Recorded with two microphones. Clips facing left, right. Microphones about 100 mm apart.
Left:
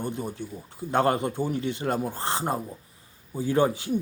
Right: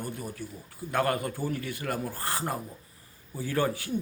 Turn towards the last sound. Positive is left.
turn(degrees=20)  # may be behind; listen again after turning